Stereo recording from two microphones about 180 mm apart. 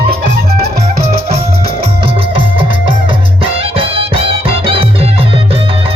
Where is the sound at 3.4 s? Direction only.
30° right (ahead or behind).